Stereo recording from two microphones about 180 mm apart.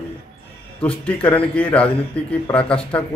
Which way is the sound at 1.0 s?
10° left (ahead or behind).